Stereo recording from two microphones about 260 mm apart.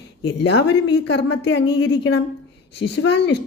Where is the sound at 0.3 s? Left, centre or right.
Left.